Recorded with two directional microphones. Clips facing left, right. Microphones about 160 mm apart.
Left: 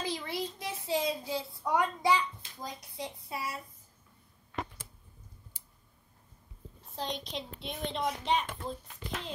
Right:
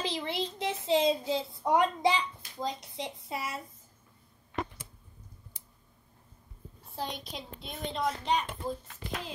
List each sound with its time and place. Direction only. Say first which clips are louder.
0.1 s a sound: right 2 dB; 25° right (ahead or behind)
0.6 s a child's voice: right 7 dB; 25° right (ahead or behind)
7.0 s a child's voice: left 1 dB; 5° right (ahead or behind)